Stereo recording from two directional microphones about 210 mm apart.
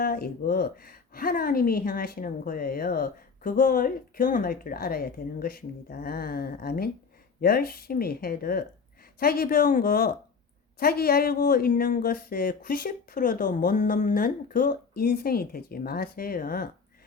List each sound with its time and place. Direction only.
0.0 s a woman's voice: 45° left (ahead or behind)